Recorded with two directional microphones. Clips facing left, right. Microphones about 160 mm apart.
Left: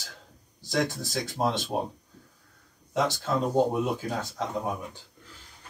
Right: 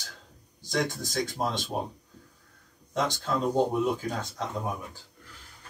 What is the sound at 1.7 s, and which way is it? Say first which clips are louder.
Speech: left 3 dB; 15° left (ahead or behind).